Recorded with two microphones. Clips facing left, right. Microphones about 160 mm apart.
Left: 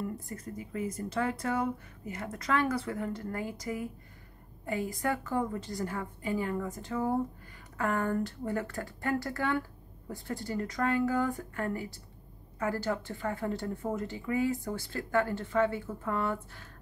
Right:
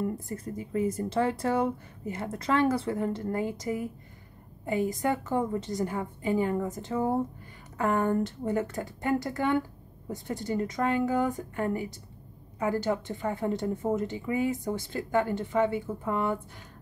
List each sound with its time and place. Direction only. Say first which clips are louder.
0.3 s a woman's voice: right 6 dB; 30° right (ahead or behind)